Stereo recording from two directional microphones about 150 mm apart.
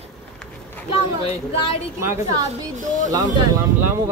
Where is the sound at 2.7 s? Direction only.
55° right (ahead or behind).